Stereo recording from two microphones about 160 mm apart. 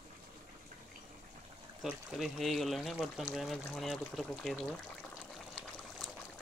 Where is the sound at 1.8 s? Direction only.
Centre (ahead or behind).